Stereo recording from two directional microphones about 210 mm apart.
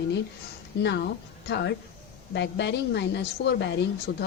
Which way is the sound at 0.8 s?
55° left (ahead or behind).